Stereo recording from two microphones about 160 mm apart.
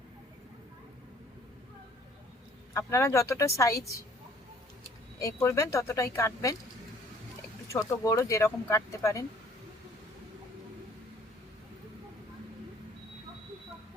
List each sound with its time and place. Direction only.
2.7 s a woman's voice: 20° left (ahead or behind)
5.2 s a woman's voice: 20° left (ahead or behind)
7.7 s a woman's voice: 20° left (ahead or behind)